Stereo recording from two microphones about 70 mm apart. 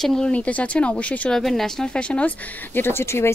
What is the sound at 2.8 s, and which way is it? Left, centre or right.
Speech, left.